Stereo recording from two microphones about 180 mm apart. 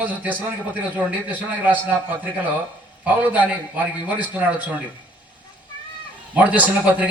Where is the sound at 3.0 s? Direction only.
10° right (ahead or behind).